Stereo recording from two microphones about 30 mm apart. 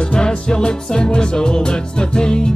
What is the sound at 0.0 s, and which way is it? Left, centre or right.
Music, left.